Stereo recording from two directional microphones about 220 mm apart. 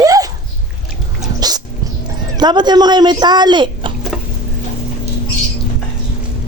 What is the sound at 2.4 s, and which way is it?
Speech, 20° right (ahead or behind).